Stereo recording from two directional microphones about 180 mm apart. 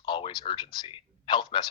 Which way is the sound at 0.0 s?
25° left (ahead or behind).